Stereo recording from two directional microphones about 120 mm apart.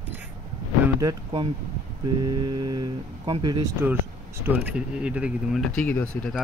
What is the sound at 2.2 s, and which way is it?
Speech, 35° right (ahead or behind).